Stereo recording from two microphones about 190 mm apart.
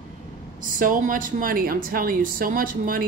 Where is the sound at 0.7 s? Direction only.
45° right (ahead or behind).